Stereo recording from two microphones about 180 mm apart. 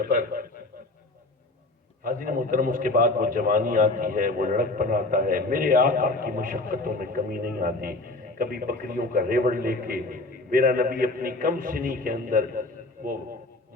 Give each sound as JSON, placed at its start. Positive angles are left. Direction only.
{"t": 0.0, "sound": "a man's voice", "side_deg": -50}
{"t": 2.0, "sound": "a man's voice", "side_deg": -50}